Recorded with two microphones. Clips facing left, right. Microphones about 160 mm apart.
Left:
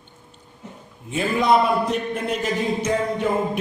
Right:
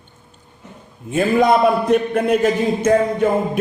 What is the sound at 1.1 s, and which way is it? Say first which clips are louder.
A man's voice: right 4 dB; 50° right (ahead or behind).